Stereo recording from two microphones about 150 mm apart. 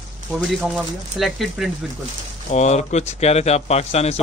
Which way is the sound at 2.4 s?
50° left (ahead or behind).